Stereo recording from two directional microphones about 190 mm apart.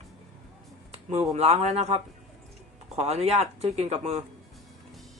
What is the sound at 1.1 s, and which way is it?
Speech, 35° right (ahead or behind).